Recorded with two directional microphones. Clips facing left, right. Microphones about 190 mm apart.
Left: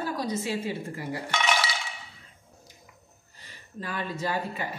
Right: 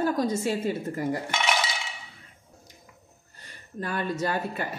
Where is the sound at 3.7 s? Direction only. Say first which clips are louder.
Right 4 dB; 45° right (ahead or behind).